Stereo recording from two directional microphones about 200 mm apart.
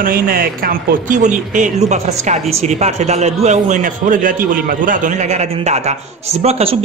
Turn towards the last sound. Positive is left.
turn(degrees=-30)  # may be behind; listen again after turning